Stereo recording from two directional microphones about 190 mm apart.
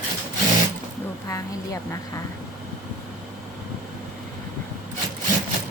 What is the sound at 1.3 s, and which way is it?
Speech, 15° left (ahead or behind).